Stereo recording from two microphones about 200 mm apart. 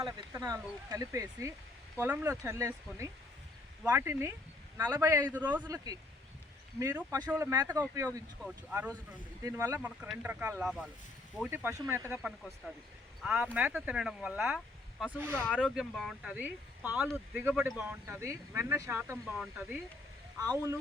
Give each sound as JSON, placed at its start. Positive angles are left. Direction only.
{"t": 0.0, "sound": "speech", "side_deg": -20}
{"t": 9.4, "sound": "speech", "side_deg": -15}
{"t": 15.4, "sound": "speech", "side_deg": 5}
{"t": 20.4, "sound": "speech", "side_deg": -20}